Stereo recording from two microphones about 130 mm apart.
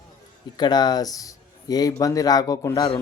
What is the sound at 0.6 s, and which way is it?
A man's voice, 30° left (ahead or behind).